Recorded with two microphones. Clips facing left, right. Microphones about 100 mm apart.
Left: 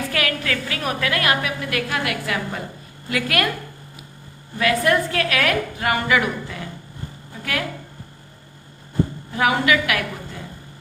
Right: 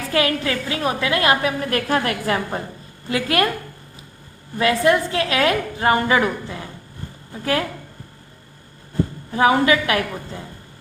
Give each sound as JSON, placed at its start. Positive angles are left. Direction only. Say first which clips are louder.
{"t": 0.1, "sound": "a woman's voice", "louder": "right 4 dB", "side_deg": -25}
{"t": 4.5, "sound": "a woman's voice", "louder": "right 2 dB", "side_deg": -30}
{"t": 9.3, "sound": "a woman's voice", "louder": "right 3 dB", "side_deg": -30}